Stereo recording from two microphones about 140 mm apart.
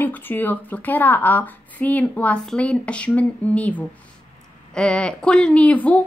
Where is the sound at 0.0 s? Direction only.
15° left (ahead or behind).